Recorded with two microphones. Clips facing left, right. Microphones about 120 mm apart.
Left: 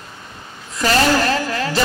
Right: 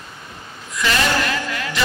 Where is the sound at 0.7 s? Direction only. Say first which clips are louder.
Left 4 dB; 35° left (ahead or behind).